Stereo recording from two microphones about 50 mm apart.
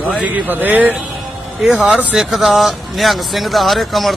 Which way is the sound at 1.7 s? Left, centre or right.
Centre.